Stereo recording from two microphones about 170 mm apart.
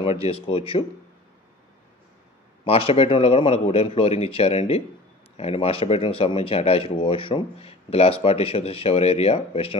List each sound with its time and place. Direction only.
0.2 s speech: 35° left (ahead or behind)
2.6 s speech: 35° left (ahead or behind)